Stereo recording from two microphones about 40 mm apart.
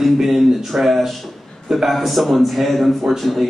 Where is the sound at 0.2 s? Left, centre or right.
Centre.